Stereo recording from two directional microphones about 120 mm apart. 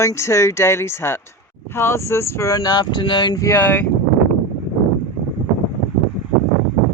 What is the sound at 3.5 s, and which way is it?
Speech, 20° left (ahead or behind).